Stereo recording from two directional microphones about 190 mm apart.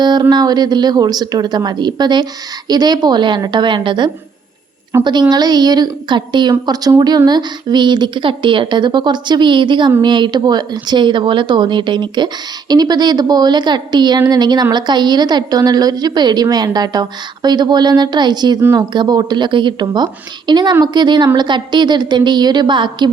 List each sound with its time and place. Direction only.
0.0 s a woman's voice: 20° right (ahead or behind)